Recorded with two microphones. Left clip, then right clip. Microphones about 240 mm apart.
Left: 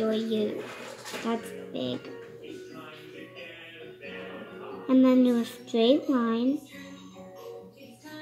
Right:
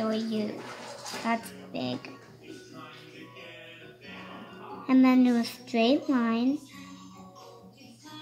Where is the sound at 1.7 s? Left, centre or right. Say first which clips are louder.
Left 1 dB; right.